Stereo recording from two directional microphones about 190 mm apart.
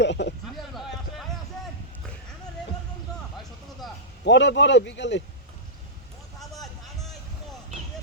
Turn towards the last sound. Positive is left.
turn(degrees=0)  # may be behind; listen again after turning